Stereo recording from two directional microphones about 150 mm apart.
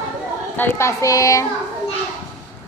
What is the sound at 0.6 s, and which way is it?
Speech, 15° left (ahead or behind).